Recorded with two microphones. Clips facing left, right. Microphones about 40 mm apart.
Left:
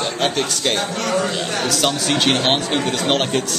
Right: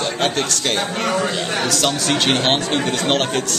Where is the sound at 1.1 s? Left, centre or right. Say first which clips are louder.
Even; centre.